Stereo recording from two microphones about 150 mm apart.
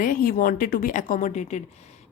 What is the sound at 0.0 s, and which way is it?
A woman's voice, 70° left (ahead or behind).